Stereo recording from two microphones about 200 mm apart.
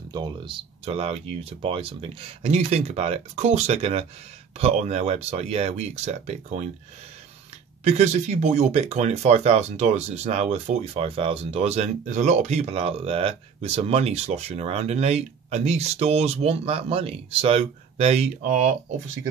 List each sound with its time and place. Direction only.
0.1 s speech: 25° right (ahead or behind)
7.8 s speech: 35° right (ahead or behind)